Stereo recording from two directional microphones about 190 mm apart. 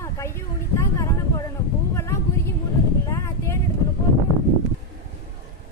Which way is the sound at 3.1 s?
15° left (ahead or behind).